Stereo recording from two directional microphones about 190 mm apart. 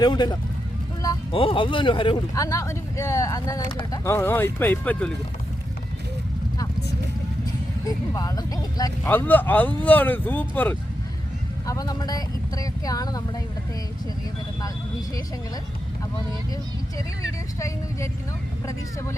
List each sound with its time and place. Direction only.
0.0 s speech: 20° left (ahead or behind)
7.9 s speech: 20° left (ahead or behind)
9.0 s speech: 10° left (ahead or behind)